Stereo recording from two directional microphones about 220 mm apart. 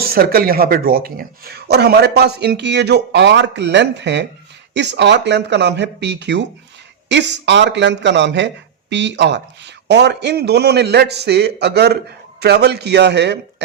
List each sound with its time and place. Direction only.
0.0 s speech: 45° right (ahead or behind)